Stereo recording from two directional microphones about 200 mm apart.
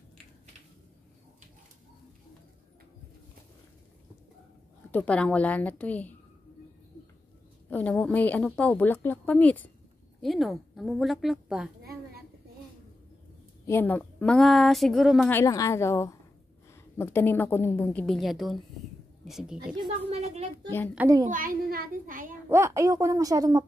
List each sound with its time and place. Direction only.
4.9 s a woman's voice: 5° left (ahead or behind)
7.7 s a woman's voice: 5° left (ahead or behind)
13.7 s a woman's voice: 10° left (ahead or behind)
15.2 s a woman's voice: 15° left (ahead or behind); by 19.6 s centre (ahead or behind)
19.7 s a woman's voice: 25° right (ahead or behind)
21.3 s a child's voice: 45° right (ahead or behind)
22.5 s a woman's voice: 15° right (ahead or behind)